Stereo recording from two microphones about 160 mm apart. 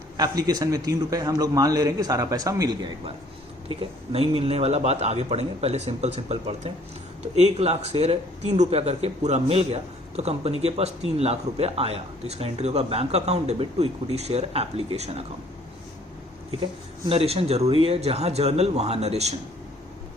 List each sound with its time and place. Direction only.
0.2 s a man's voice: 25° right (ahead or behind)
3.7 s speech: 35° right (ahead or behind)
17.1 s speech: 35° right (ahead or behind)